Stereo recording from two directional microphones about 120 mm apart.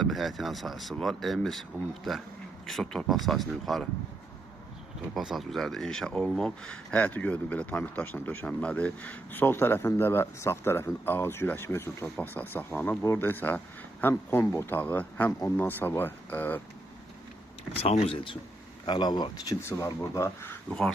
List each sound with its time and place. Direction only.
0.0 s speech: centre (ahead or behind)
5.1 s speech: centre (ahead or behind); by 16.6 s 15° left (ahead or behind)
17.8 s speech: 55° left (ahead or behind); by 20.6 s 20° left (ahead or behind)
20.7 s speech: 5° left (ahead or behind)